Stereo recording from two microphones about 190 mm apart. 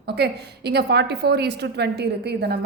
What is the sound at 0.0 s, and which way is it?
A woman's voice, 60° right (ahead or behind).